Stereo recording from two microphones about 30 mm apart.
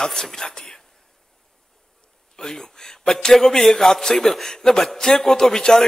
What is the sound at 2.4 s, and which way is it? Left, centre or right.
A man's voice, centre.